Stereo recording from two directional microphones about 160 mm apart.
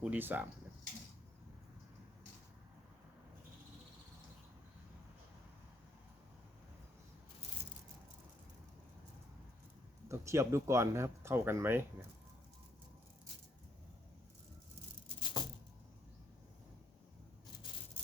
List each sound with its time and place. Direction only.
0.0 s speech: 10° right (ahead or behind)
10.1 s speech: 20° right (ahead or behind)
15.2 s music: 30° left (ahead or behind)